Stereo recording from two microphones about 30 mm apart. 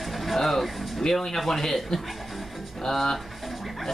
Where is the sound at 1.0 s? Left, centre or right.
Centre.